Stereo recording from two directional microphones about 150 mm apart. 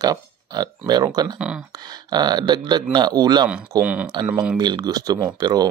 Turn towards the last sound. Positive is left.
turn(degrees=-25)  # may be behind; listen again after turning